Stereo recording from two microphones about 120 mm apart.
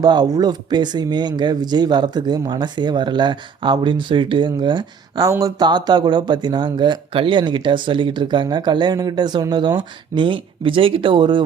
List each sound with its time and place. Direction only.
0.0 s speech: 35° right (ahead or behind)